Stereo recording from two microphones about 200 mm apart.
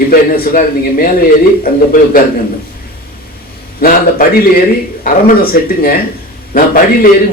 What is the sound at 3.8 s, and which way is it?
A man's voice, 45° left (ahead or behind).